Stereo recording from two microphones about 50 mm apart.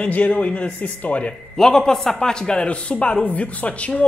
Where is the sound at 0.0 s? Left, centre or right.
Left.